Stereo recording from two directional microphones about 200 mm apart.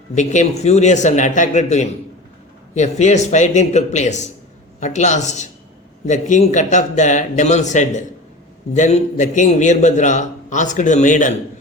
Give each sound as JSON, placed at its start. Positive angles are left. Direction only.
{"t": 0.1, "sound": "a man's voice", "side_deg": 35}